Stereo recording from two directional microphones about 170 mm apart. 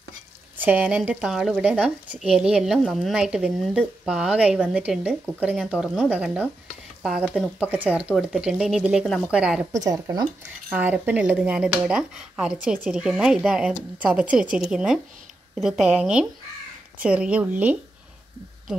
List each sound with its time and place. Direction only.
0.6 s speech: 10° right (ahead or behind)
9.8 s speech: 20° right (ahead or behind)